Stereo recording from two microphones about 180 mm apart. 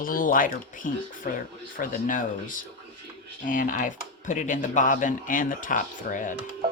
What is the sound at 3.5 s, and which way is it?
Speech, 45° left (ahead or behind).